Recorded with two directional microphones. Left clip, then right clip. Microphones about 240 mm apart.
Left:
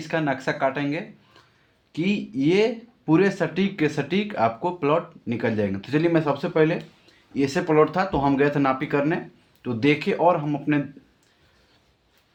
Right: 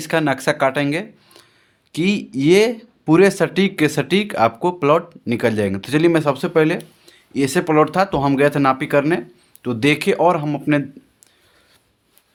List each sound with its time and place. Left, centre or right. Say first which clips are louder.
0.0 s speech: right 7 dB; right